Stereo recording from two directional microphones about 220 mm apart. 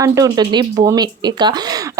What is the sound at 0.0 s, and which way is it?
Speech, 15° right (ahead or behind).